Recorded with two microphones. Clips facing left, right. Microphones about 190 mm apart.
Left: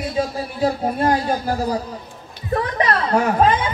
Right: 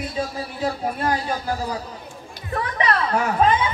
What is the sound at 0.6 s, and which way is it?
Speech, 35° left (ahead or behind).